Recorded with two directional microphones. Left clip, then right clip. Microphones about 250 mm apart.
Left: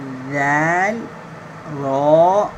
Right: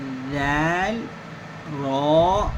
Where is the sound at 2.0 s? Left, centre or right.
Centre.